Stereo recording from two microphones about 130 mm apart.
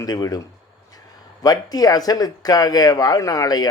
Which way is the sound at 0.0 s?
30° left (ahead or behind).